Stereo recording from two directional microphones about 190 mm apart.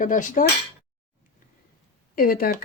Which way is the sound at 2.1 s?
50° left (ahead or behind).